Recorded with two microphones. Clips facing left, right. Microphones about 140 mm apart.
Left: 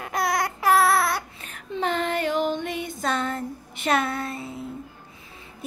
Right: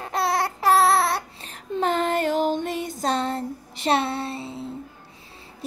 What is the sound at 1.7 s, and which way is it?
Music, 45° right (ahead or behind).